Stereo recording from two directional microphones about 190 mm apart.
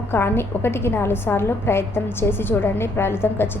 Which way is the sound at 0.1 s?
10° left (ahead or behind).